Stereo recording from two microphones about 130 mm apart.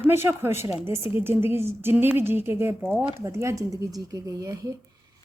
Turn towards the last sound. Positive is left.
turn(degrees=-25)  # may be behind; listen again after turning